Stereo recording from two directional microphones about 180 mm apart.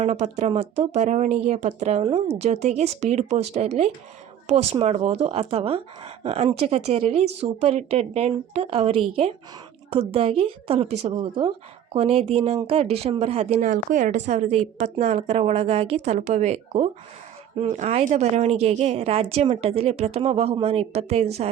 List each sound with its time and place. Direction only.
0.0 s a woman's voice: 40° right (ahead or behind)